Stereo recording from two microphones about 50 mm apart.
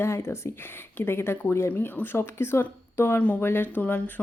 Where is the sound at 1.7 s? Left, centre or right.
Left.